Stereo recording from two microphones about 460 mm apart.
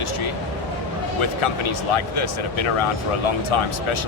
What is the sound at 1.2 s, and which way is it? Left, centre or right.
Speech, left.